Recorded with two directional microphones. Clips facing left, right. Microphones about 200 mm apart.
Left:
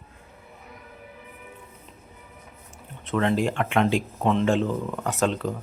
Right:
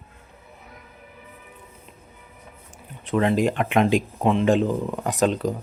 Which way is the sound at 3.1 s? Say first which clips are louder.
Right 3 dB; 15° right (ahead or behind).